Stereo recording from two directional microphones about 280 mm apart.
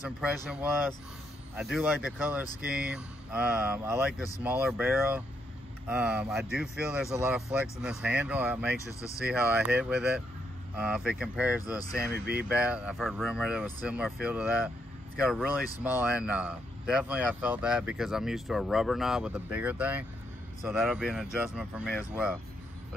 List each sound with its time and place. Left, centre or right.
0.2 s speech: centre
8.8 s speech: centre
9.2 s speech: centre
12.1 s speech: right
12.4 s speech: centre